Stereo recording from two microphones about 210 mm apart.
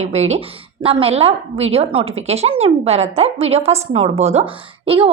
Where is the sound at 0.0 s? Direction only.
30° right (ahead or behind).